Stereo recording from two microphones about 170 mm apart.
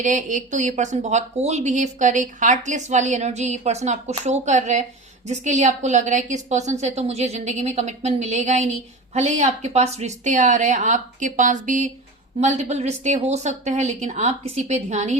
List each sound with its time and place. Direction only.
0.0 s speech: 45° right (ahead or behind)